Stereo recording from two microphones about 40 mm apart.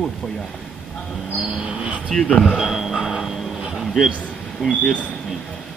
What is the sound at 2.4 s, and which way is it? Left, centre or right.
Dog, centre.